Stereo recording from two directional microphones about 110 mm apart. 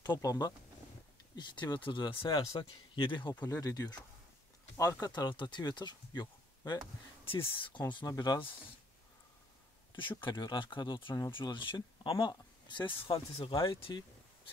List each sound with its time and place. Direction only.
0.0 s speech: 40° left (ahead or behind)
3.5 s speech: 30° left (ahead or behind)
5.0 s speech: 40° left (ahead or behind)
7.2 s speech: 55° left (ahead or behind)
7.9 s speech: 40° left (ahead or behind)
9.9 s speech: 50° left (ahead or behind)